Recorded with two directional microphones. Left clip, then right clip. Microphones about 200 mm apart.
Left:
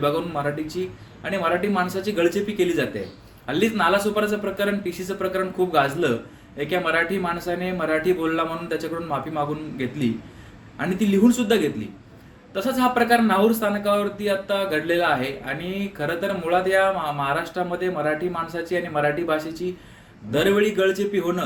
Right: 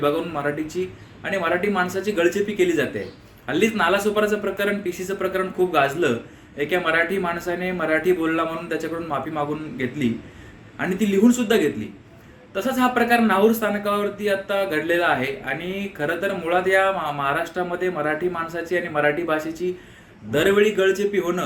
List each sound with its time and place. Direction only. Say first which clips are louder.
0.0 s a man's voice: right 1 dB; 5° left (ahead or behind)